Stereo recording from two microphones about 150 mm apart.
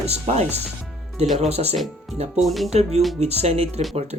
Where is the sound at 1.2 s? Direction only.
Centre (ahead or behind).